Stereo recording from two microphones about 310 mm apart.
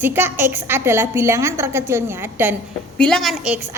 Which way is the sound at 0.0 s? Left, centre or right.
Centre.